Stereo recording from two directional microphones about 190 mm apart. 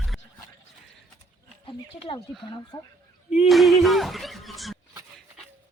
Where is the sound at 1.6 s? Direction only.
30° left (ahead or behind).